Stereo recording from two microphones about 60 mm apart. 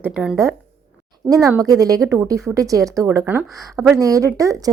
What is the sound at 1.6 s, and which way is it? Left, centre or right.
Speech, right.